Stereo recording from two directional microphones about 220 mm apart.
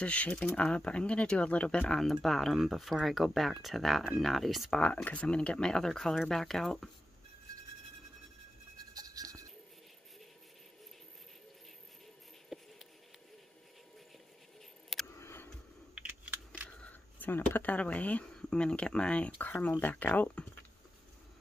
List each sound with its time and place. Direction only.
0.0 s speech: 5° left (ahead or behind)
8.9 s music: 15° right (ahead or behind)
12.5 s a sound: centre (ahead or behind)
15.1 s a sound: 10° left (ahead or behind)
15.9 s computer keyboard: 5° right (ahead or behind)
16.6 s speech: 5° left (ahead or behind)